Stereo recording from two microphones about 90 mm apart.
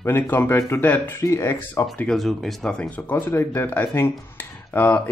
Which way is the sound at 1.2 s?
35° left (ahead or behind).